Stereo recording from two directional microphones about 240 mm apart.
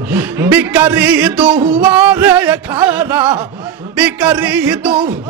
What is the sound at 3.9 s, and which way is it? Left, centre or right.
A man's voice, centre.